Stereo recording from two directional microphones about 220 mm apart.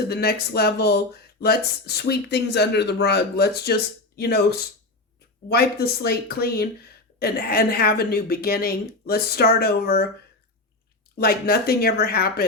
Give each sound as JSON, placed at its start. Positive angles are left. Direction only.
{"t": 0.1, "sound": "speech", "side_deg": 45}
{"t": 5.5, "sound": "speech", "side_deg": 45}
{"t": 11.2, "sound": "speech", "side_deg": 45}